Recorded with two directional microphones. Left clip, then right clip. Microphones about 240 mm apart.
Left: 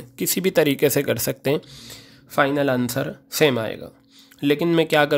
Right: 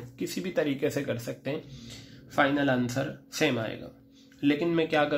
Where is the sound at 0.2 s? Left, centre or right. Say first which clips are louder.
Left 10 dB; left.